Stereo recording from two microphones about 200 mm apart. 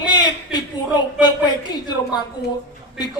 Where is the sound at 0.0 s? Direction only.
20° left (ahead or behind).